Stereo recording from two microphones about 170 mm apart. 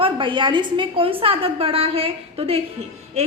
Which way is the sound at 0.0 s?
30° right (ahead or behind).